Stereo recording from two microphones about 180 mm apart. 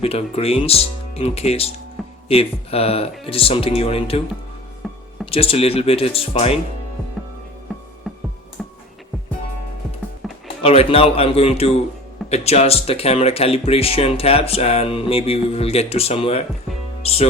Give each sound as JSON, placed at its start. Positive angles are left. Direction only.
{"t": 0.0, "sound": "speech", "side_deg": 35}
{"t": 4.8, "sound": "a sound", "side_deg": 0}
{"t": 5.2, "sound": "speech", "side_deg": 30}
{"t": 8.1, "sound": "music", "side_deg": 0}
{"t": 10.2, "sound": "music", "side_deg": 0}
{"t": 10.6, "sound": "speech", "side_deg": 30}